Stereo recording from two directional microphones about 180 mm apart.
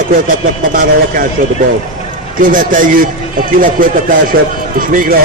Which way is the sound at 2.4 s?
50° right (ahead or behind).